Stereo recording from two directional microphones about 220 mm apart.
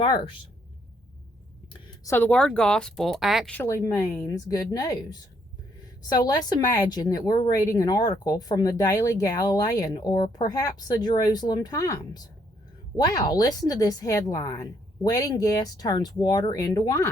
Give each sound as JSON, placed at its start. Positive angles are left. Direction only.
{"t": 0.0, "sound": "speech", "side_deg": 20}
{"t": 2.0, "sound": "speech", "side_deg": 10}
{"t": 6.0, "sound": "speech", "side_deg": 20}
{"t": 13.1, "sound": "speech", "side_deg": 20}